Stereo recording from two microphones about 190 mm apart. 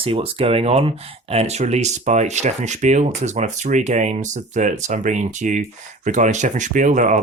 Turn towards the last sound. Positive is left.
turn(degrees=-40)  # may be behind; listen again after turning